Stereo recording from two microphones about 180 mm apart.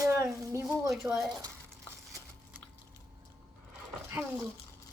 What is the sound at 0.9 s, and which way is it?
Speech, centre (ahead or behind).